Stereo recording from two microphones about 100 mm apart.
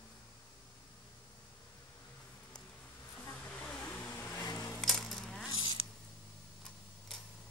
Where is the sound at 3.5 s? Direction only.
10° left (ahead or behind).